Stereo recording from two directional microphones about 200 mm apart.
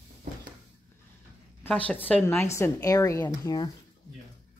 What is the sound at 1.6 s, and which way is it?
Speech, 5° left (ahead or behind).